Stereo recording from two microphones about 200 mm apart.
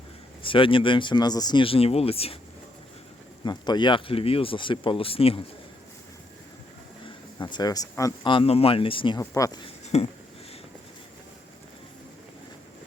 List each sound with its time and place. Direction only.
0.4 s speech: 25° left (ahead or behind)
3.4 s speech: 20° left (ahead or behind)
7.3 s speech: 20° left (ahead or behind)
9.6 s a sound: 30° left (ahead or behind)